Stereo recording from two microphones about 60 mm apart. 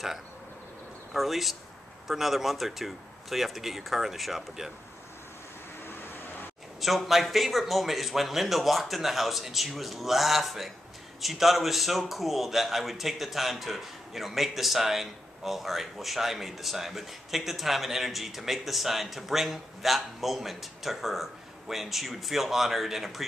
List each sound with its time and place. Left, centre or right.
1.1 s a man's voice: centre
5.9 s vehicle: left
6.8 s a man's voice: centre